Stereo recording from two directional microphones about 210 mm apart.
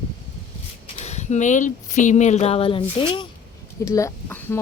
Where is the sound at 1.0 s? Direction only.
35° left (ahead or behind).